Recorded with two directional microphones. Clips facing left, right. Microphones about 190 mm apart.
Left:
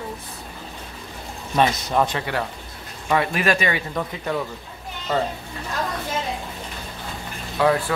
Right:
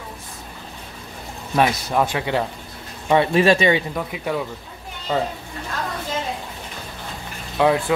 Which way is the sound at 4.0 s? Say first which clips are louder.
Right 1 dB; 10° right (ahead or behind).